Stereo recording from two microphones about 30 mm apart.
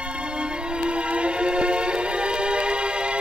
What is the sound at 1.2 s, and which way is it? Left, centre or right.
Music, right.